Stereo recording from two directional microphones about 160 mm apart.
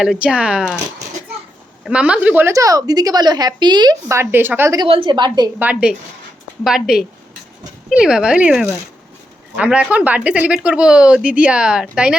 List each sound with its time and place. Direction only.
0.0 s speech: 5° right (ahead or behind)
1.8 s a woman's voice: 5° right (ahead or behind)
4.9 s a woman's voice: 30° right (ahead or behind)
5.5 s speech: 10° right (ahead or behind)